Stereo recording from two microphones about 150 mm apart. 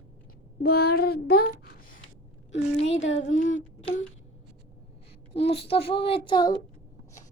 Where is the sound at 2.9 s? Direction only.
55° left (ahead or behind).